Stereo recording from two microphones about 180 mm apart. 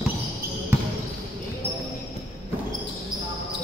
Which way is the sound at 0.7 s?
15° right (ahead or behind).